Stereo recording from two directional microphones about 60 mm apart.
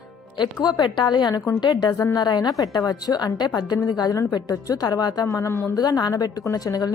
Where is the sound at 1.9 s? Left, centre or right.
Left.